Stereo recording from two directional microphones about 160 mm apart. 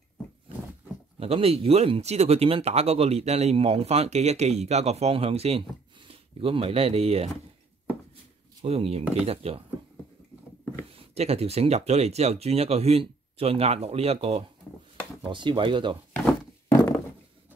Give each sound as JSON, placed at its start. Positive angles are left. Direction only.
{"t": 1.2, "sound": "speech", "side_deg": -40}
{"t": 8.6, "sound": "speech", "side_deg": -40}
{"t": 10.9, "sound": "speech", "side_deg": -40}
{"t": 16.1, "sound": "a sound", "side_deg": 10}